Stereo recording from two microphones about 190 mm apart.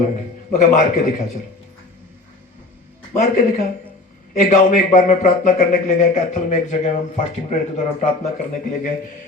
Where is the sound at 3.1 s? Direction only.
40° left (ahead or behind).